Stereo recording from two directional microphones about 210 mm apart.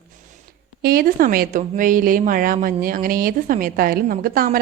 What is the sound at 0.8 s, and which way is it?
A woman's voice, 45° right (ahead or behind).